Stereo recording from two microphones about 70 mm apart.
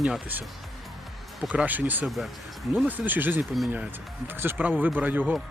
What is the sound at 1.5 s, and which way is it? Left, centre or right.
Speech, right.